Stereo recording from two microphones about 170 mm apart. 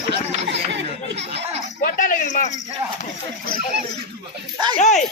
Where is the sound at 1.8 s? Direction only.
50° left (ahead or behind).